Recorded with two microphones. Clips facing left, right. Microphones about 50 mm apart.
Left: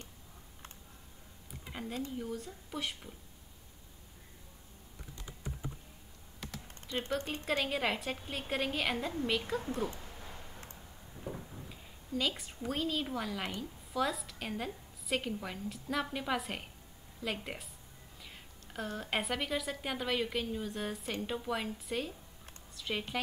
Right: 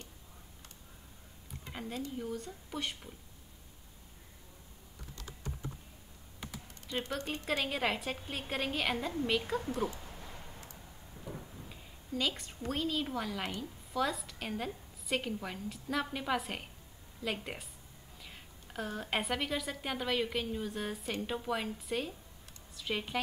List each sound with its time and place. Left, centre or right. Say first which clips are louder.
1.6 s a sound: even; centre
2.1 s a woman's voice: right 1 dB; centre
5.1 s typing: even; centre
7.4 s a woman's voice: even; centre
11.7 s a woman's voice: left 1 dB; centre